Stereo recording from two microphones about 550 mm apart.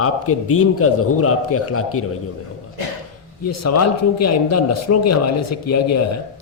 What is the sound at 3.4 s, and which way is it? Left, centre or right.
A man's voice, left.